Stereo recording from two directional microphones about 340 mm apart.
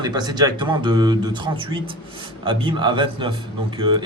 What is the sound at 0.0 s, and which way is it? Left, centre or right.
A man's voice, centre.